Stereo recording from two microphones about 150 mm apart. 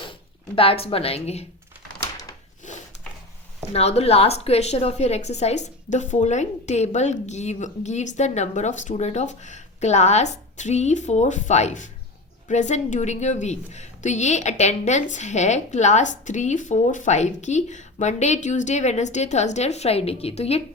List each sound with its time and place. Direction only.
0.5 s a woman's voice: 40° left (ahead or behind)
2.0 s a sound: 25° left (ahead or behind)
3.7 s a woman's voice: 40° left (ahead or behind)